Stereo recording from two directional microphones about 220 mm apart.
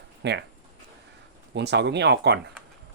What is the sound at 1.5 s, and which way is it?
Speech, 50° right (ahead or behind).